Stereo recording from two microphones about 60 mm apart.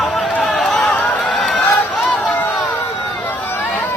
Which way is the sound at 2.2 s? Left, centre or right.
Left.